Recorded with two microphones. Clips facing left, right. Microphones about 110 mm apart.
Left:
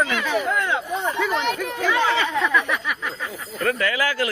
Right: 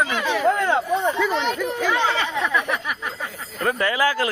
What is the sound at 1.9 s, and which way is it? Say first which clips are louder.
Speech: left 1 dB; 30° right (ahead or behind).